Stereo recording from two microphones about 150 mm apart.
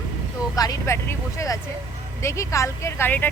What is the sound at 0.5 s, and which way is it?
Speech, 25° left (ahead or behind).